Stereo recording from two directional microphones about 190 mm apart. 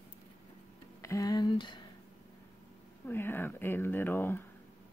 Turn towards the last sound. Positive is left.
turn(degrees=10)  # may be behind; listen again after turning